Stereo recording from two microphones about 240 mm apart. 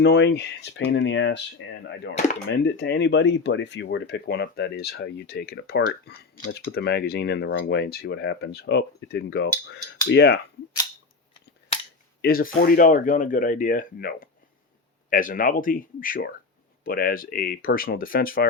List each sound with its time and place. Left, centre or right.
0.0 s speech: left
2.5 s speech: left
12.2 s speech: left